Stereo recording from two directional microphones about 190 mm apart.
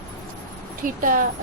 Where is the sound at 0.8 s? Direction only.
45° right (ahead or behind).